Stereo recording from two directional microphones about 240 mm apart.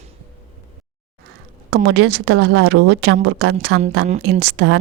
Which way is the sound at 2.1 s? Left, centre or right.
Right.